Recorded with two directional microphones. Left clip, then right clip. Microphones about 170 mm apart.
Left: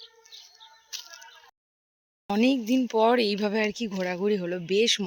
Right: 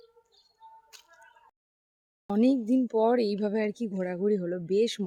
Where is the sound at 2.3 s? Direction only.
10° right (ahead or behind).